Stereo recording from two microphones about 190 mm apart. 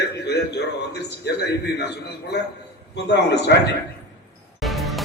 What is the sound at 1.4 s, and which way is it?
A man's voice, 60° left (ahead or behind).